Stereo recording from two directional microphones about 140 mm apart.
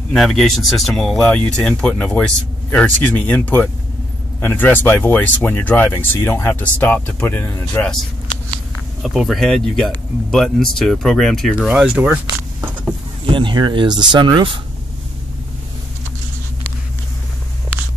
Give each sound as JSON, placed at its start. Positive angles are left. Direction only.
{"t": 0.1, "sound": "speech", "side_deg": 0}
{"t": 9.0, "sound": "speech", "side_deg": 0}
{"t": 13.2, "sound": "speech", "side_deg": -35}